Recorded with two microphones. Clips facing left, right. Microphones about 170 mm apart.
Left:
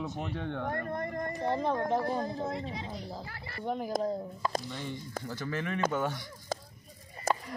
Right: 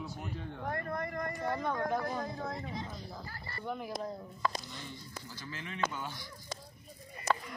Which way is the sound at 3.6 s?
30° left (ahead or behind).